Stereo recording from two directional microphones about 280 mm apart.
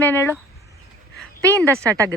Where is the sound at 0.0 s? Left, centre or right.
Centre.